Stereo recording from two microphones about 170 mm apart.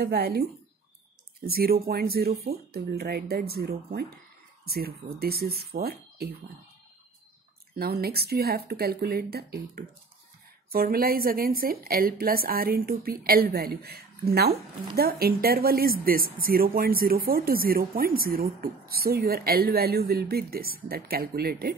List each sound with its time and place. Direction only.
0.0 s speech: 70° right (ahead or behind)
7.7 s speech: 65° right (ahead or behind)